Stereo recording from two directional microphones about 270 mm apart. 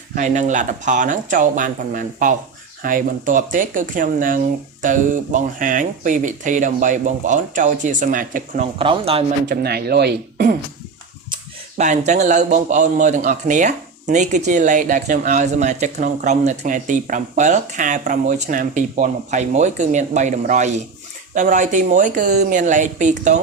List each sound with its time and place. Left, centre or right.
0.1 s a man's voice: right
8.8 s a man's voice: centre
9.6 s speech: right
11.8 s a man's voice: right